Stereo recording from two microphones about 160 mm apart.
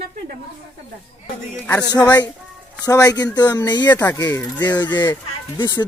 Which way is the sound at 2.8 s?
20° left (ahead or behind).